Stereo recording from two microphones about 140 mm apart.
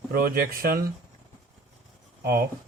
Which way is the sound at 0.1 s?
90° right.